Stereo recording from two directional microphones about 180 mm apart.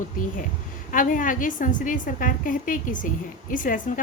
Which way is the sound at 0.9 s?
45° left (ahead or behind).